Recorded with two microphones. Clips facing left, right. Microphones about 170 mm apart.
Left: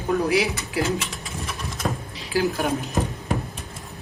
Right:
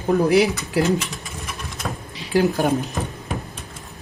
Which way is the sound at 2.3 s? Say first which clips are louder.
Right 4 dB; 35° right (ahead or behind).